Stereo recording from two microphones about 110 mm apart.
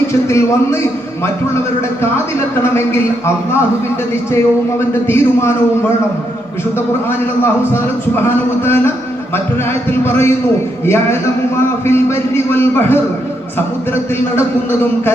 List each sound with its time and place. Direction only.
0.3 s speech: 25° left (ahead or behind)
2.7 s speech: 20° left (ahead or behind)
5.0 s speech: 25° left (ahead or behind)
7.4 s speech: 20° left (ahead or behind)
10.0 s speech: 25° left (ahead or behind)